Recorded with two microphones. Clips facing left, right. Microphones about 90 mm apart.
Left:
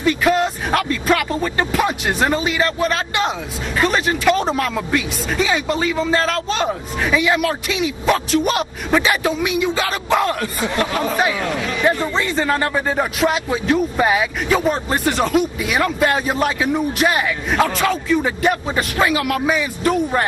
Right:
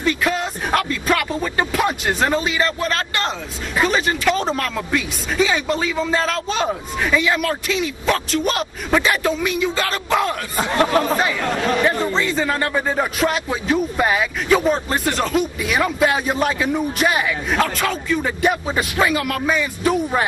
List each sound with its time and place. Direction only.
0.0 s music: centre (ahead or behind)
3.7 s speech: centre (ahead or behind)
11.9 s speech: 5° left (ahead or behind)